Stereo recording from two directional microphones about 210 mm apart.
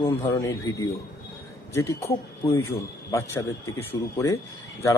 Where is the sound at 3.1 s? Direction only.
15° left (ahead or behind).